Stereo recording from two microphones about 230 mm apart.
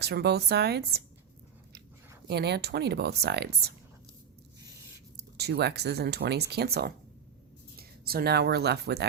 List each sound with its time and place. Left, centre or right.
0.0 s speech: right
2.2 s speech: right
5.1 s speech: right